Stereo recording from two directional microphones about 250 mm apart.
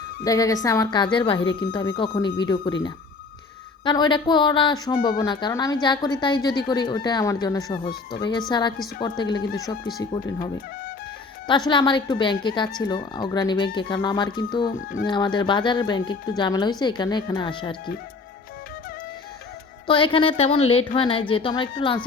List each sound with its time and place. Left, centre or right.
0.3 s a woman's voice: centre
3.8 s a woman's voice: centre
11.4 s a woman's voice: centre
19.9 s a woman's voice: centre